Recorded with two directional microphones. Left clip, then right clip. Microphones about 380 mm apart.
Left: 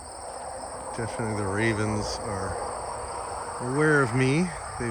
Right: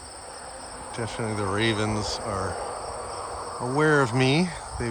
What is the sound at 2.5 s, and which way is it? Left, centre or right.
Insect, left.